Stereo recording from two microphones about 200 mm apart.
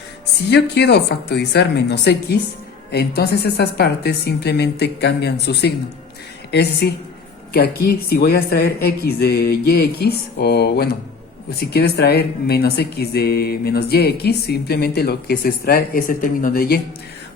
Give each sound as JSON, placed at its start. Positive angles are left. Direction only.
{"t": 0.5, "sound": "a woman's voice", "side_deg": 55}